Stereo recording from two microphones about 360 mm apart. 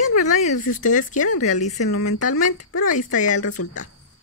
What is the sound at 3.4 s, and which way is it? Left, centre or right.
Speech, left.